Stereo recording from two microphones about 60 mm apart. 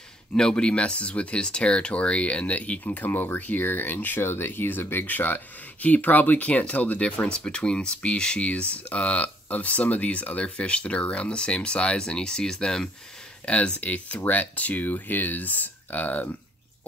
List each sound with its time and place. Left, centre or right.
0.4 s speech: centre; by 16.3 s left